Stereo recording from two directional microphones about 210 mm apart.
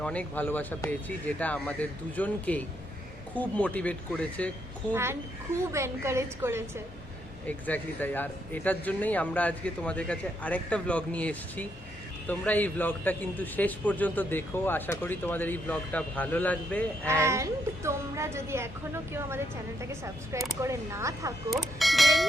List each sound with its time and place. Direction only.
0.0 s a man's voice: 5° left (ahead or behind)
5.7 s speech: 15° right (ahead or behind)
7.4 s a man's voice: 10° left (ahead or behind)
17.1 s speech: 15° right (ahead or behind)
19.8 s speech: 15° right (ahead or behind)
21.5 s speech: centre (ahead or behind)